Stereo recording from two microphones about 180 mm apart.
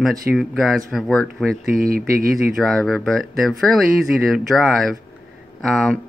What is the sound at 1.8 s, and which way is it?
Speech, 55° right (ahead or behind).